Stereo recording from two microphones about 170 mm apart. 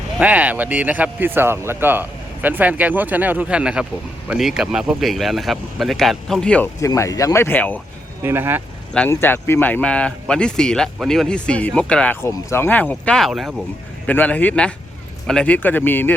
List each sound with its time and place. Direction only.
0.2 s speech: 10° right (ahead or behind)
6.7 s speech: 20° left (ahead or behind)
8.2 s speech: 15° right (ahead or behind)
8.9 s speech: 10° left (ahead or behind)
14.1 s speech: 10° left (ahead or behind)